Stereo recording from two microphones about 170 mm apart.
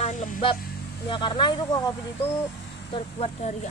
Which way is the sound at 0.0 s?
45° left (ahead or behind).